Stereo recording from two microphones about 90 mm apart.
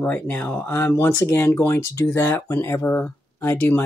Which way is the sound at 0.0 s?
20° left (ahead or behind).